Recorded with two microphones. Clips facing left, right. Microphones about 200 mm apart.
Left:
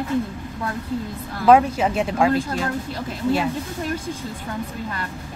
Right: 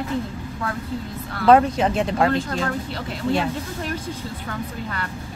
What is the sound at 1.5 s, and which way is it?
A woman's voice, 5° left (ahead or behind).